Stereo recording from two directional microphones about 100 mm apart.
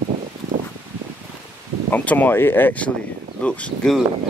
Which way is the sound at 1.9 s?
15° left (ahead or behind).